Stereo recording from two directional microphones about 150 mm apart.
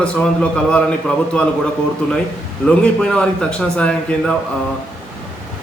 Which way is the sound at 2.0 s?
10° left (ahead or behind).